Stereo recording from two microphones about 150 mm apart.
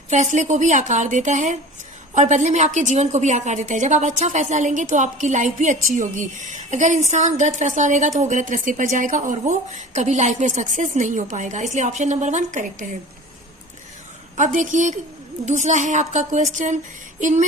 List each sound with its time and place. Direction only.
0.1 s a woman's voice: 50° right (ahead or behind)
14.3 s a woman's voice: 55° right (ahead or behind)